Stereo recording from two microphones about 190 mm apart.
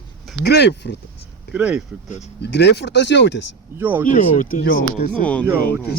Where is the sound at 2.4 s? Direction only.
60° left (ahead or behind).